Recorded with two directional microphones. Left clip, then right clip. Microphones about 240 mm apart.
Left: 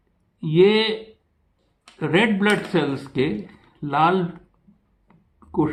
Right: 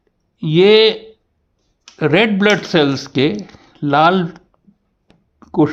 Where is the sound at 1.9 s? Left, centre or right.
Right.